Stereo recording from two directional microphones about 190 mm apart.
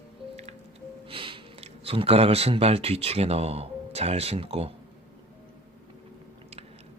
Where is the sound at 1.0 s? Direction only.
25° right (ahead or behind).